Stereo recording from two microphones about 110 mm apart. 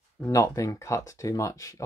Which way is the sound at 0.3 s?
30° left (ahead or behind).